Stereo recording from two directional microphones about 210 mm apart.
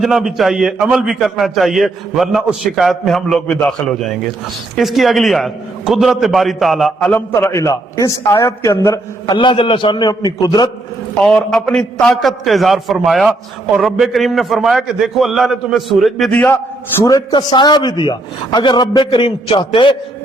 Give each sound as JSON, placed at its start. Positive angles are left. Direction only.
{"t": 0.0, "sound": "a man's voice", "side_deg": 0}
{"t": 7.3, "sound": "a man's voice", "side_deg": 15}
{"t": 11.2, "sound": "a man's voice", "side_deg": 0}
{"t": 17.0, "sound": "a man's voice", "side_deg": 20}